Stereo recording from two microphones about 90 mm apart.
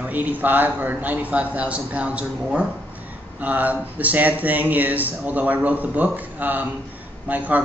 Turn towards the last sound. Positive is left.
turn(degrees=-20)  # may be behind; listen again after turning